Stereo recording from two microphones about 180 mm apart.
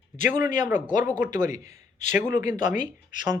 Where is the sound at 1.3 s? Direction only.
45° left (ahead or behind).